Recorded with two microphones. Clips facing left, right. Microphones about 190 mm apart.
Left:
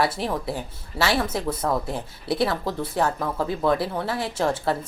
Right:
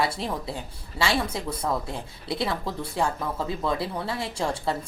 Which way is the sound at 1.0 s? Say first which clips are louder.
Left 3 dB; 25° left (ahead or behind).